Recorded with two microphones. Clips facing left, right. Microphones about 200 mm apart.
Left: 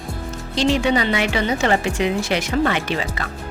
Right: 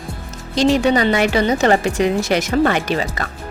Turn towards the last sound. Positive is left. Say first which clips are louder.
# right 3 dB
turn(degrees=-45)  # may be behind; listen again after turning